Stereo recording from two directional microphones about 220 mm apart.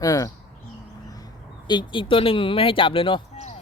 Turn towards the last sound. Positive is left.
turn(degrees=25)  # may be behind; listen again after turning